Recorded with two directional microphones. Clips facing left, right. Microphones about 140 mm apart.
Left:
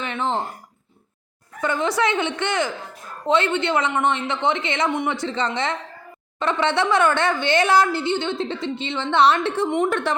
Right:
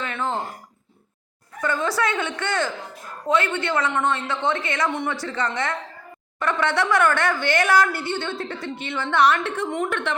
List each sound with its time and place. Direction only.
0.0 s a sound: 20° left (ahead or behind)
1.6 s speech: 20° left (ahead or behind)
9.9 s a woman's voice: 40° left (ahead or behind)